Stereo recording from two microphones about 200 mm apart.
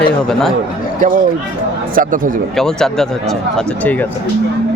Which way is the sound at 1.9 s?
40° right (ahead or behind).